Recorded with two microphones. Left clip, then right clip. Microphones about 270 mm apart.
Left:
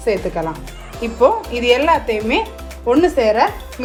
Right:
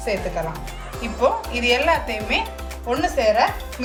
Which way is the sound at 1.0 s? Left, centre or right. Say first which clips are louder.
Left 6 dB; left.